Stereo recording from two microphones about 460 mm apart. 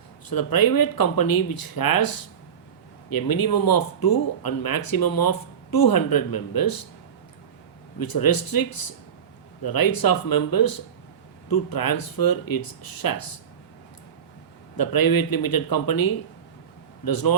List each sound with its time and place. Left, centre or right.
0.3 s speech: left
7.9 s speech: left
14.8 s speech: left